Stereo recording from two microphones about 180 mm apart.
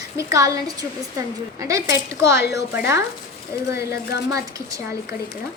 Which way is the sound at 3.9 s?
65° left (ahead or behind).